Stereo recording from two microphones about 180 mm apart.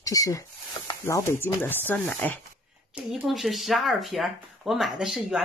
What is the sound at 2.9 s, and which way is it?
Speech, 5° right (ahead or behind).